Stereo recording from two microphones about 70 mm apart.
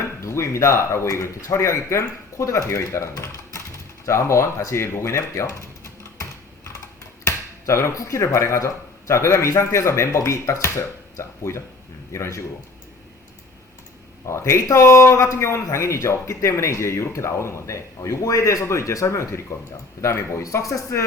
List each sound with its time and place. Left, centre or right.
0.2 s a man's voice: left
7.3 s a man's voice: left
14.3 s a man's voice: left
20.4 s a man's voice: left